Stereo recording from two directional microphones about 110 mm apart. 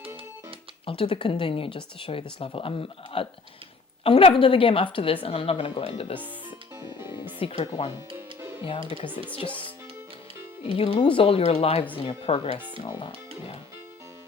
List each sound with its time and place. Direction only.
0.9 s a woman's voice: 55° left (ahead or behind)
7.3 s a woman's voice: 60° left (ahead or behind)
10.7 s a woman's voice: 55° left (ahead or behind)
12.8 s speech: 50° left (ahead or behind)